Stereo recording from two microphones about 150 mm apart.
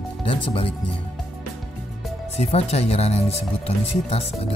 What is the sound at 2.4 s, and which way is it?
Speech, 45° left (ahead or behind).